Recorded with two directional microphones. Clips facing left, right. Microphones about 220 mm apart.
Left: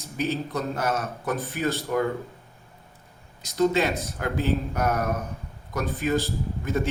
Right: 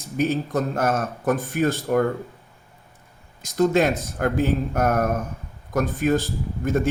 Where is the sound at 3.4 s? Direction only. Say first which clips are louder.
Right 3 dB; 50° right (ahead or behind).